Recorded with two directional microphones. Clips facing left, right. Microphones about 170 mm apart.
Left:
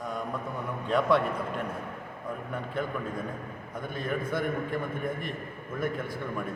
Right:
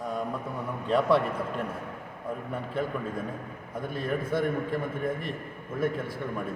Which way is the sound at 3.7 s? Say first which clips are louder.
Right 3 dB; 30° right (ahead or behind).